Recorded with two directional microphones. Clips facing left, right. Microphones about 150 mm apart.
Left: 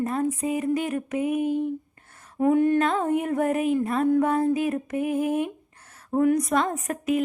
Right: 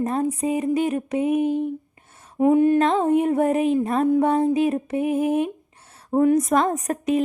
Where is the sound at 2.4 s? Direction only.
20° right (ahead or behind).